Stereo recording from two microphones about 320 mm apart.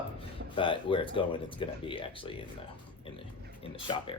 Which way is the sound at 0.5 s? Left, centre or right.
Centre.